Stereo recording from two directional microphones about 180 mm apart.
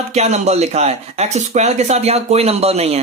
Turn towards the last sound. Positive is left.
turn(degrees=-35)  # may be behind; listen again after turning